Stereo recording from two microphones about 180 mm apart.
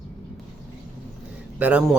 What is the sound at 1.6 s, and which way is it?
Speech, 10° right (ahead or behind).